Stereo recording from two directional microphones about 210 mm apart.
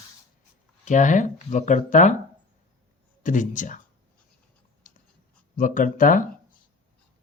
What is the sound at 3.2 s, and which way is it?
Speech, 35° left (ahead or behind).